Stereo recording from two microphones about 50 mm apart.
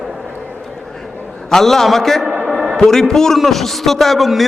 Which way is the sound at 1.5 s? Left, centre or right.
Centre.